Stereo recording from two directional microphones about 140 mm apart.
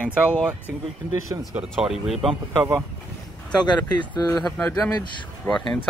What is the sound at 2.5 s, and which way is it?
Speech, 20° right (ahead or behind).